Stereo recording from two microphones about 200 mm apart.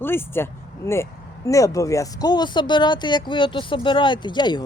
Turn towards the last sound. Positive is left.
turn(degrees=20)  # may be behind; listen again after turning